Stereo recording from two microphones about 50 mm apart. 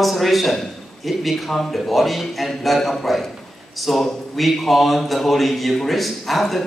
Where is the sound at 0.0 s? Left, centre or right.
Centre.